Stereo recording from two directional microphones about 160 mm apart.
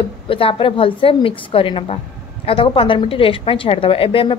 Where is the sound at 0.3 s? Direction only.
35° left (ahead or behind).